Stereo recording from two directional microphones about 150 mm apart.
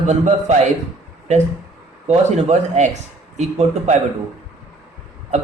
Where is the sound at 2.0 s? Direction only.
50° right (ahead or behind).